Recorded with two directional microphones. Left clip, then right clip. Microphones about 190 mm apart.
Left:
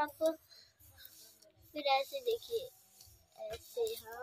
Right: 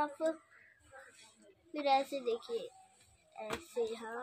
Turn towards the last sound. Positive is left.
turn(degrees=20)  # may be behind; listen again after turning